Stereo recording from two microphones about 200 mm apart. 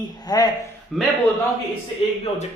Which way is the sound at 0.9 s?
Centre (ahead or behind).